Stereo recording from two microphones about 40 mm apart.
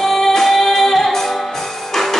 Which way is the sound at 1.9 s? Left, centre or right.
Centre.